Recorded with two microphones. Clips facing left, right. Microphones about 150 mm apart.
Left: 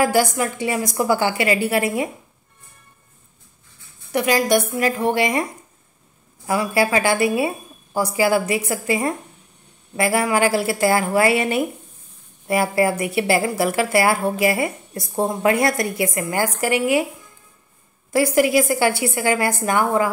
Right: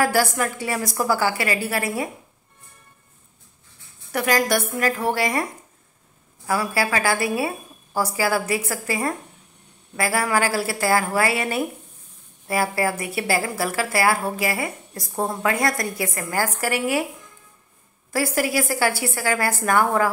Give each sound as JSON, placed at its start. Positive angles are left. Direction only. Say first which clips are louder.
{"t": 0.0, "sound": "speech", "louder": "left 2 dB", "side_deg": 15}
{"t": 4.4, "sound": "a woman's voice", "louder": "left 3 dB", "side_deg": 15}
{"t": 6.4, "sound": "speech", "louder": "left 4 dB", "side_deg": 20}
{"t": 18.1, "sound": "a woman's voice", "louder": "left 6 dB", "side_deg": 20}